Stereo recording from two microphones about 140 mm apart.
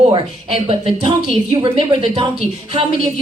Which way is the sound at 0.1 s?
40° right (ahead or behind).